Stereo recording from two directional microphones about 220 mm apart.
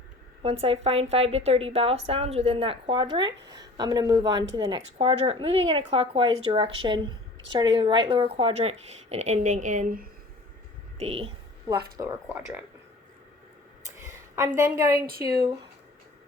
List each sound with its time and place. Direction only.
0.4 s a woman's voice: 25° right (ahead or behind)
10.9 s speech: 30° right (ahead or behind)
11.9 s speech: 15° right (ahead or behind)
14.3 s speech: 15° right (ahead or behind)
14.9 s speech: 40° right (ahead or behind)